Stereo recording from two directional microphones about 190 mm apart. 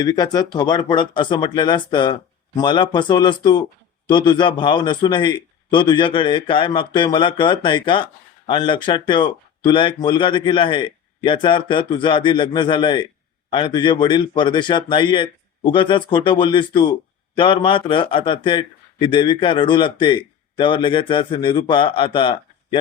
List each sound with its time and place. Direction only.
0.0 s a man's voice: 20° left (ahead or behind)